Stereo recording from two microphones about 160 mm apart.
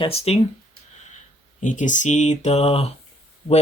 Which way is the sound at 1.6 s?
50° left (ahead or behind).